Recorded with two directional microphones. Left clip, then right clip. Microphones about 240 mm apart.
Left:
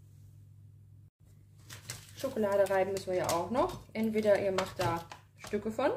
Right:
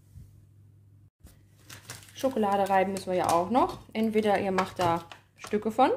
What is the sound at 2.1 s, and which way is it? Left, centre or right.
Speech, right.